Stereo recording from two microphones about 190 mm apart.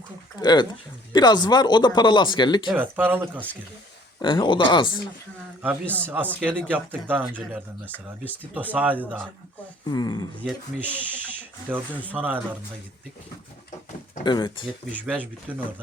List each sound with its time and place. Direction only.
0.3 s speech: 25° left (ahead or behind)
2.6 s speech: 10° right (ahead or behind)
4.2 s speech: 25° left (ahead or behind)
5.8 s speech: 5° left (ahead or behind)
6.7 s speech: 10° right (ahead or behind)
7.9 s speech: 10° left (ahead or behind)
8.5 s speech: 10° right (ahead or behind)
9.8 s speech: 20° left (ahead or behind)
10.4 s speech: 5° left (ahead or behind)
12.1 s speech: 10° right (ahead or behind)
14.3 s speech: 25° left (ahead or behind)
14.9 s speech: 10° right (ahead or behind)